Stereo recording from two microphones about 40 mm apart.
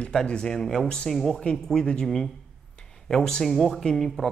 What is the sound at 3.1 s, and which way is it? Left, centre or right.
A man's voice, centre.